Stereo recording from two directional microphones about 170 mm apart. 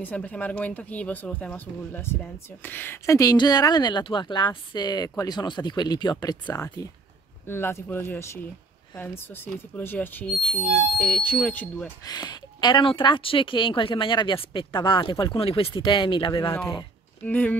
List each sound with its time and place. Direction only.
0.0 s speech: 10° left (ahead or behind)
12.0 s speech: 25° left (ahead or behind)
17.2 s speech: 10° left (ahead or behind)